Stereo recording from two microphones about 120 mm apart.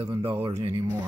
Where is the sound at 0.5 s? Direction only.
25° right (ahead or behind).